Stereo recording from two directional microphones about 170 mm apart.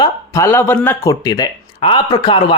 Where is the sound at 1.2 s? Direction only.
25° left (ahead or behind).